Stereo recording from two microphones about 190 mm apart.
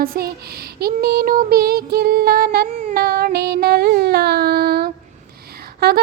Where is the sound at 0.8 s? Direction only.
55° right (ahead or behind).